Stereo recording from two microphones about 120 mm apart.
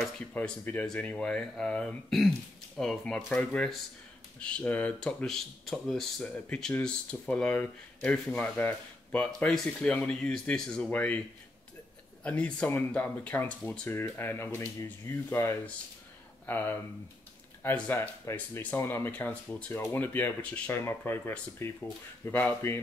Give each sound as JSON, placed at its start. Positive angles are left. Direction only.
{"t": 0.3, "sound": "speech", "side_deg": 15}